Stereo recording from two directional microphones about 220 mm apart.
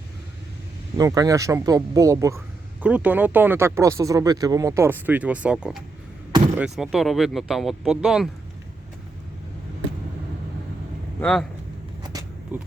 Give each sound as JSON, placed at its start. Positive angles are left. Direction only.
{"t": 0.9, "sound": "speech", "side_deg": -15}
{"t": 11.2, "sound": "speech", "side_deg": 5}
{"t": 12.0, "sound": "vehicle", "side_deg": -15}